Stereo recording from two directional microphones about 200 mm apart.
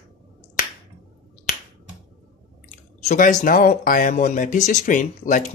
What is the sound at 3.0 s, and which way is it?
Speech, 40° left (ahead or behind).